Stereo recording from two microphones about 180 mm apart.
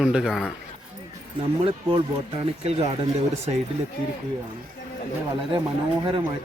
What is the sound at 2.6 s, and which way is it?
Speech, 35° right (ahead or behind).